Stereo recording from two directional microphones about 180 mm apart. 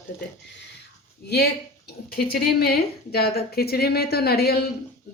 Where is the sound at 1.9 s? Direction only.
60° left (ahead or behind).